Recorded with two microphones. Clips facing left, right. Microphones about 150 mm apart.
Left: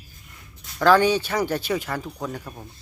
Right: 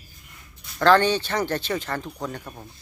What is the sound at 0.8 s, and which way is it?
Speech, 10° left (ahead or behind).